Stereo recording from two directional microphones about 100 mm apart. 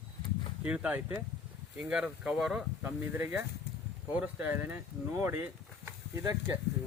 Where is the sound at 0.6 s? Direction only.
10° right (ahead or behind).